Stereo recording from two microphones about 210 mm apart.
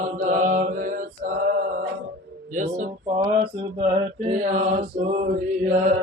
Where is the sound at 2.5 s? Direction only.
35° right (ahead or behind).